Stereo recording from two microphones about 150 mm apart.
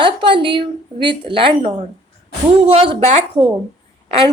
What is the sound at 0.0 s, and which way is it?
A woman's voice, 35° right (ahead or behind).